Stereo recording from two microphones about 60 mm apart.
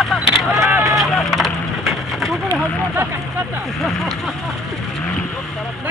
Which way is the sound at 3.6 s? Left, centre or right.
Centre.